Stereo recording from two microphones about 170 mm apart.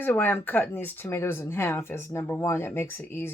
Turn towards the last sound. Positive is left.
turn(degrees=15)  # may be behind; listen again after turning